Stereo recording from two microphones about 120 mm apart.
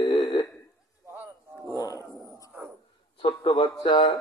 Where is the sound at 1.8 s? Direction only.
30° left (ahead or behind).